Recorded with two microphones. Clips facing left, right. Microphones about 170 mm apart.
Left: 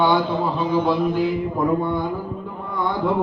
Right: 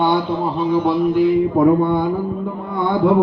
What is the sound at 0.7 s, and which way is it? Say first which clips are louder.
A man's voice: right 4 dB; 60° right (ahead or behind).